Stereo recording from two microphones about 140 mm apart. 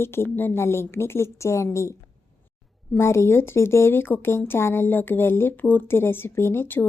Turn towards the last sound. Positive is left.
turn(degrees=15)  # may be behind; listen again after turning